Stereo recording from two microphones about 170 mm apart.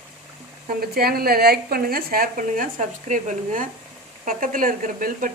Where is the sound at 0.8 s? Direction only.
65° right (ahead or behind).